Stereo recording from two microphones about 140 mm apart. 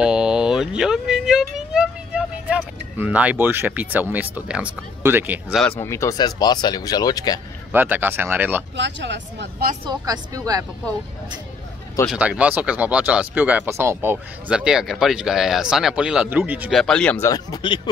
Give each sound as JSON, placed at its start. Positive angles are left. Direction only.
{"t": 0.0, "sound": "a sound", "side_deg": -5}
{"t": 5.8, "sound": "speech", "side_deg": 20}
{"t": 7.7, "sound": "speech", "side_deg": -15}
{"t": 9.8, "sound": "speech", "side_deg": -30}
{"t": 12.1, "sound": "speech", "side_deg": -10}
{"t": 14.1, "sound": "speech", "side_deg": -5}
{"t": 16.7, "sound": "speech", "side_deg": 5}
{"t": 17.2, "sound": "speech", "side_deg": 25}